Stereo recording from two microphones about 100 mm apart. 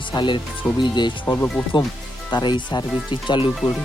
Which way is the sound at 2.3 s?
50° left (ahead or behind).